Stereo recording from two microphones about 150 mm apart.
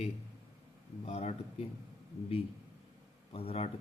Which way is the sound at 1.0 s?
45° left (ahead or behind).